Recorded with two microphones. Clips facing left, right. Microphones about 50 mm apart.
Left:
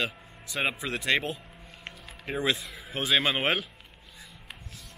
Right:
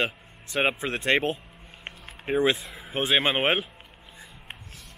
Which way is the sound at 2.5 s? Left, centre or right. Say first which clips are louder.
Right 1 dB; centre.